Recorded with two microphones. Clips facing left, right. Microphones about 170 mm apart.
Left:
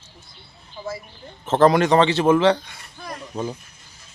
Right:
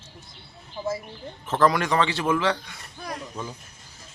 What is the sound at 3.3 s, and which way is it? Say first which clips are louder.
Speech: left 7 dB; 35° left (ahead or behind).